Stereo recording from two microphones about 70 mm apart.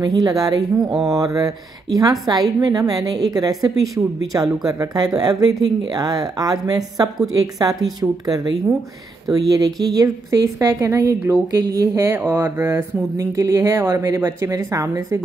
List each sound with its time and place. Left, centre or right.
0.0 s a woman's voice: right
1.0 s a woman's voice: right
10.7 s speech: right
12.0 s speech: right